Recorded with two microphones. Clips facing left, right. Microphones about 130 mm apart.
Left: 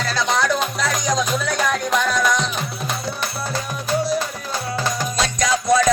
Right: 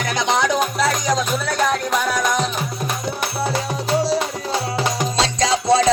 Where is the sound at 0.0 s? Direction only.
20° right (ahead or behind).